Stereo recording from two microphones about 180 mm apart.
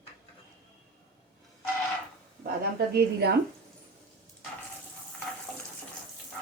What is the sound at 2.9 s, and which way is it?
Speech, 60° right (ahead or behind).